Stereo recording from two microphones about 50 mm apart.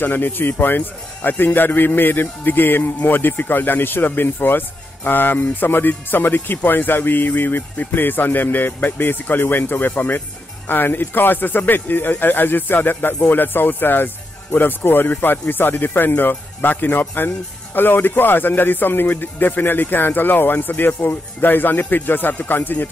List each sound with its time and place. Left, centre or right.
0.0 s a man's voice: left